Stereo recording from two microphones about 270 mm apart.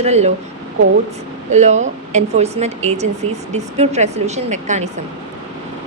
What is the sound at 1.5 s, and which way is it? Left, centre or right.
A woman's voice, right.